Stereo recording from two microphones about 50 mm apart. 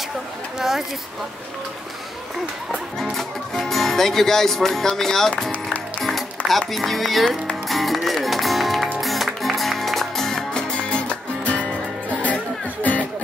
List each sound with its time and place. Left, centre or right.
0.6 s speech: centre
3.0 s speech: centre
5.5 s music: left
6.0 s music: centre
6.7 s speech: centre
7.6 s music: centre; by 11.6 s left